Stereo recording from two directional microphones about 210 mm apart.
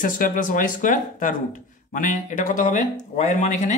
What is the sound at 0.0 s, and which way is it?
Speech, 40° left (ahead or behind).